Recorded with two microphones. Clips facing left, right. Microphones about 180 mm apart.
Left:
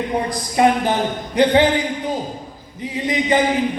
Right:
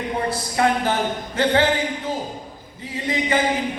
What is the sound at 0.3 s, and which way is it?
A man's voice, 15° left (ahead or behind).